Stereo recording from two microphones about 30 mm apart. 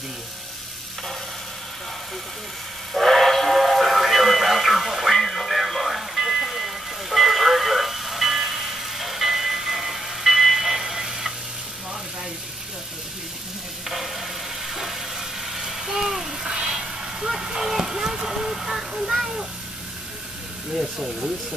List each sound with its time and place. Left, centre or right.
3.0 s music: centre
13.8 s vehicle: centre; by 17.3 s right
17.3 s a sound: centre